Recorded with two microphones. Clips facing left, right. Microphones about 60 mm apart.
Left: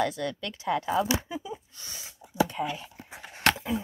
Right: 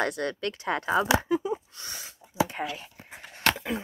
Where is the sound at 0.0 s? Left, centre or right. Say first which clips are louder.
Right 1 dB; right.